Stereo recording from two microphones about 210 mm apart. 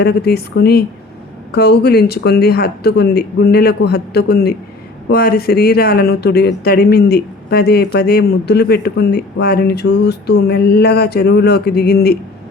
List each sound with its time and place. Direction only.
0.0 s speech: 50° left (ahead or behind)